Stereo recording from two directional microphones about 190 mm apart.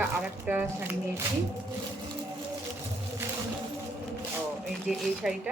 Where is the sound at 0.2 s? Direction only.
10° right (ahead or behind).